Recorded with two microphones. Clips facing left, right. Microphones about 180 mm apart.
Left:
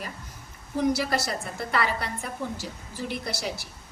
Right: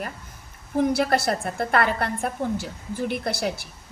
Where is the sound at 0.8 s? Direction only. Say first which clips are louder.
Right 4 dB; 55° right (ahead or behind).